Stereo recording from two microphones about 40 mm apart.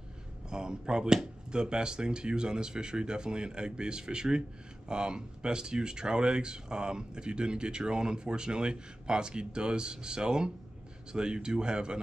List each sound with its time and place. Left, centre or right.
0.5 s speech: centre